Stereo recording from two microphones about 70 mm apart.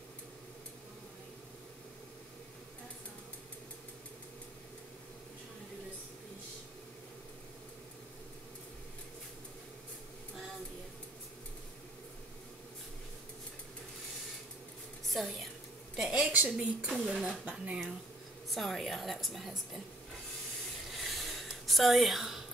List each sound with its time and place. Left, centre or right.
15.1 s a woman's voice: centre
16.3 s speech: right
16.9 s speech: centre
18.5 s a woman's voice: centre
20.9 s a sound: centre